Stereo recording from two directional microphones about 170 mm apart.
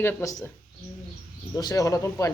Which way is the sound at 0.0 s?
15° left (ahead or behind).